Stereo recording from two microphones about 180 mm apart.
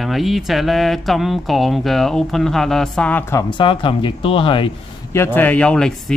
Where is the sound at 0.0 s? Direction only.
Centre (ahead or behind); by 4.7 s 30° left (ahead or behind).